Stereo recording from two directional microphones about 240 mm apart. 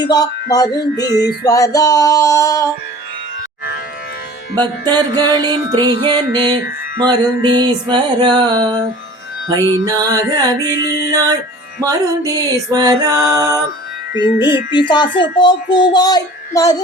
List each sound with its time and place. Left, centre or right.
0.5 s speech: centre
0.9 s music: left
1.5 s speech: centre
5.1 s music: centre
14.8 s a child's voice: centre